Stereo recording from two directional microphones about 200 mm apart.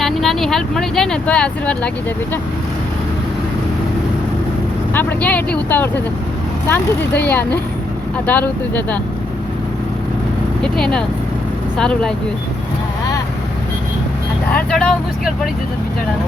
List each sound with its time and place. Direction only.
0.0 s speech: centre (ahead or behind)
4.9 s speech: 5° left (ahead or behind)
7.2 s speech: 10° left (ahead or behind)
10.6 s speech: 5° left (ahead or behind)
14.5 s speech: 5° left (ahead or behind)